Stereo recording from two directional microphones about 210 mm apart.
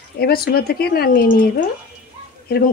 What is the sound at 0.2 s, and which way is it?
Speech, 45° left (ahead or behind).